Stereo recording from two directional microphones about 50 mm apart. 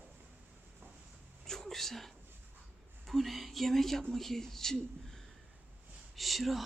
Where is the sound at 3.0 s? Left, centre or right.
Centre.